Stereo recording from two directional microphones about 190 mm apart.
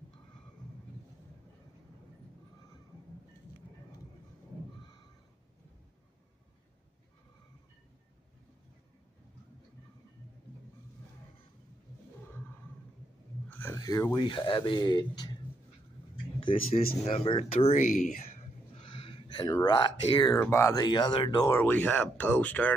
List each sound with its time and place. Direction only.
13.5 s speech: 10° left (ahead or behind); by 21.5 s 30° left (ahead or behind)
21.5 s speech: 10° left (ahead or behind)